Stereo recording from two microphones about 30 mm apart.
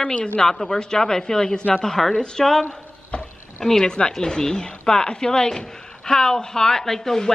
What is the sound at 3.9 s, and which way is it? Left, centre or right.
Speech, left.